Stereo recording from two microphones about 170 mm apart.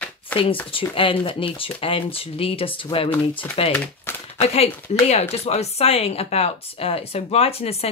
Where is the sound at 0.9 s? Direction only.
30° left (ahead or behind).